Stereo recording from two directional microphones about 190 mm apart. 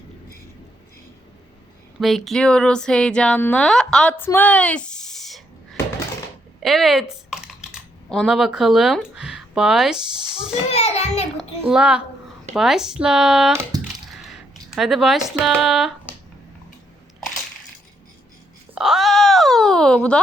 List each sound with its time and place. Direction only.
2.0 s speech: centre (ahead or behind)
6.6 s typing: centre (ahead or behind)
10.7 s a child's voice: 35° left (ahead or behind)
11.7 s speech: 5° right (ahead or behind)
14.1 s a sound: centre (ahead or behind)
18.7 s speech: centre (ahead or behind)